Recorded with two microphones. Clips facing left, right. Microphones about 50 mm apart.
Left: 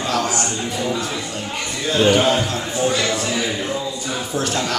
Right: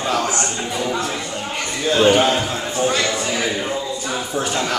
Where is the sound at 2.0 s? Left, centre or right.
Centre.